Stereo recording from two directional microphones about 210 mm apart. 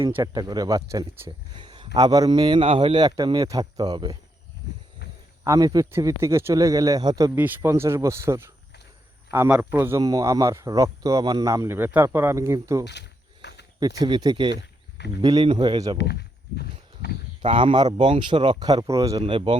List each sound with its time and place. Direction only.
0.1 s speech: 15° right (ahead or behind)
5.5 s a man's voice: 15° right (ahead or behind)
12.8 s wild animals: 55° left (ahead or behind)
14.0 s speech: 20° right (ahead or behind)
14.5 s wild animals: 55° left (ahead or behind)
15.2 s speech: 20° right (ahead or behind)
16.0 s speech: 50° left (ahead or behind)
17.4 s speech: 25° right (ahead or behind)